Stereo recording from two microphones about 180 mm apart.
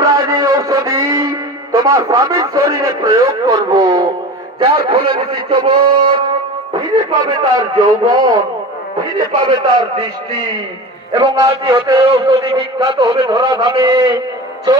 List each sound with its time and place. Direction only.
0.0 s music: 20° right (ahead or behind)
4.6 s a man's voice: 30° right (ahead or behind)